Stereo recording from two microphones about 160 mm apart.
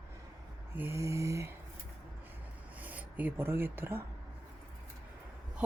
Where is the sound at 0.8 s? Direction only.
15° right (ahead or behind).